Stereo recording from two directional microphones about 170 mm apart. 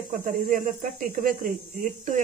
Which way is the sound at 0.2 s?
50° right (ahead or behind).